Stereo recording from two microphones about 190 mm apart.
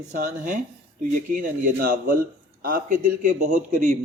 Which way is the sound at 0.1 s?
45° right (ahead or behind).